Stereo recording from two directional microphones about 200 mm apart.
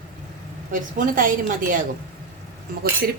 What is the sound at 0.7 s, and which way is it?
Speech, 40° right (ahead or behind).